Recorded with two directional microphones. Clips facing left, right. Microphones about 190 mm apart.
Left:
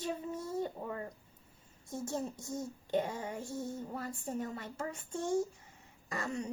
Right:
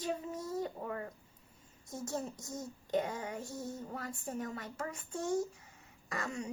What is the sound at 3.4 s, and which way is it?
Music, centre (ahead or behind).